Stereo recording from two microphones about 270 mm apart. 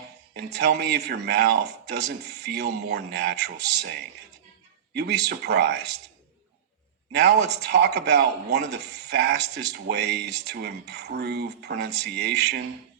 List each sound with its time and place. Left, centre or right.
0.3 s speech: right
4.9 s speech: right
7.1 s speech: right